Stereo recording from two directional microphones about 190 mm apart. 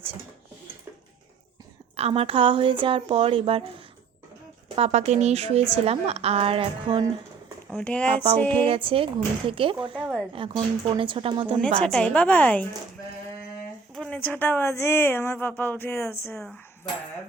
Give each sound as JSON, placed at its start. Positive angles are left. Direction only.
{"t": 2.0, "sound": "speech", "side_deg": -30}
{"t": 4.7, "sound": "a woman's voice", "side_deg": -35}
{"t": 7.7, "sound": "speech", "side_deg": 5}
{"t": 8.5, "sound": "speech", "side_deg": -30}
{"t": 10.0, "sound": "speech", "side_deg": -5}
{"t": 10.3, "sound": "speech", "side_deg": -30}
{"t": 11.8, "sound": "a woman's voice", "side_deg": 5}
{"t": 13.9, "sound": "a woman's voice", "side_deg": 5}